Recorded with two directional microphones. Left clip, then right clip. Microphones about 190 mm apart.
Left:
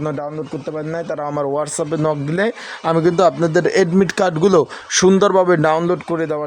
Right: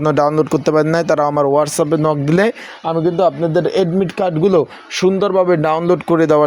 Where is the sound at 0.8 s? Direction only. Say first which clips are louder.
Right 9 dB; 25° right (ahead or behind).